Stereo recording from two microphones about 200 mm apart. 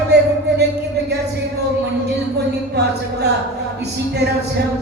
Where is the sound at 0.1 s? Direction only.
55° right (ahead or behind).